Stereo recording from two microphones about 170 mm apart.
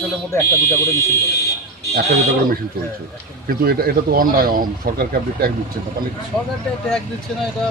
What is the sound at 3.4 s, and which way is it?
A man's voice, 65° right (ahead or behind).